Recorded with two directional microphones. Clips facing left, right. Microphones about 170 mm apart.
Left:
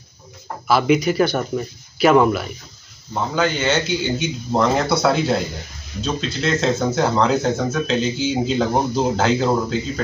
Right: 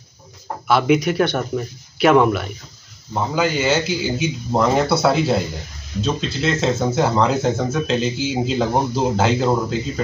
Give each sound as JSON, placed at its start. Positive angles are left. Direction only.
{"t": 0.7, "sound": "speech", "side_deg": 0}